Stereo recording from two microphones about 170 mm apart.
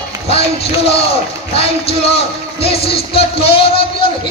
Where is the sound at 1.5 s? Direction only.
35° left (ahead or behind).